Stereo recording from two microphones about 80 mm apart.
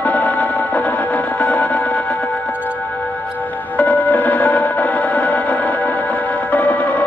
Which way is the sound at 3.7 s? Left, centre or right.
Centre.